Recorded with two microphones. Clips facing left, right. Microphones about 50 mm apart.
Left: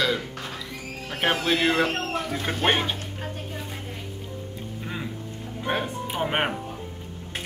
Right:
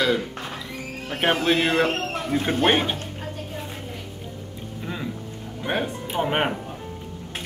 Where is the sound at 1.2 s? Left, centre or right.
Centre.